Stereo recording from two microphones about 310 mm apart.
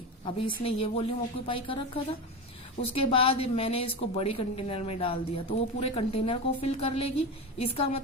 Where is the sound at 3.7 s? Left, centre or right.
Left.